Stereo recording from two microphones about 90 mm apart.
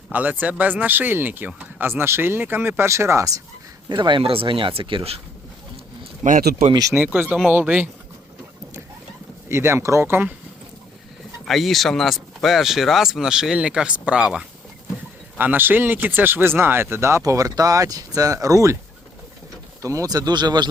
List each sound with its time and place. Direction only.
0.1 s speech: 20° right (ahead or behind); by 3.4 s 35° right (ahead or behind)
3.8 s speech: 60° right (ahead or behind); by 5.2 s 80° right
6.9 s speech: 20° right (ahead or behind)
9.5 s speech: 30° right (ahead or behind)
11.4 s speech: centre (ahead or behind)
15.4 s speech: 20° right (ahead or behind); by 18.8 s 35° right (ahead or behind)
19.8 s speech: 35° right (ahead or behind); by 20.7 s 55° right (ahead or behind)